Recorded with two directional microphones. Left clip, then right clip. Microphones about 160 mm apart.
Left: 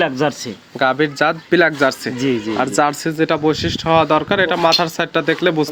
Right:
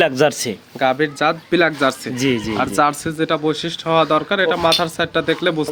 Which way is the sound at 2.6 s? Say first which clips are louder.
Left 1 dB; 5° left (ahead or behind).